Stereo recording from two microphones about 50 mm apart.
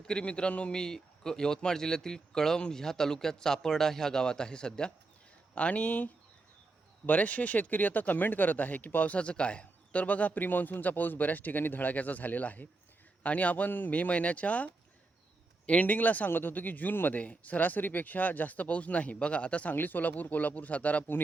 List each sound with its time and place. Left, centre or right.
0.1 s a man's voice: left
17.2 s speech: left
19.7 s speech: left